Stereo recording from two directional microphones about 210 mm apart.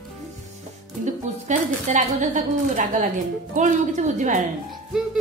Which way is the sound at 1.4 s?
35° right (ahead or behind).